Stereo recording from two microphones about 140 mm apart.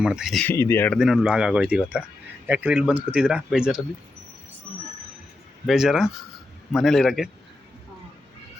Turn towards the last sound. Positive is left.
turn(degrees=0)  # may be behind; listen again after turning